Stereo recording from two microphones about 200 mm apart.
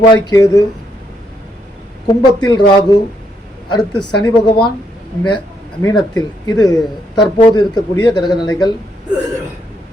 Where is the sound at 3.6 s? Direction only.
20° left (ahead or behind).